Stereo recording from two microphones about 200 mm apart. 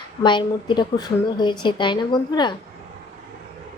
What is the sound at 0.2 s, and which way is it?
Speech, 20° left (ahead or behind).